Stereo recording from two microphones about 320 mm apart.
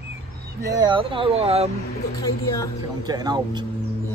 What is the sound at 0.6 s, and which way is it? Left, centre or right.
Speech, centre.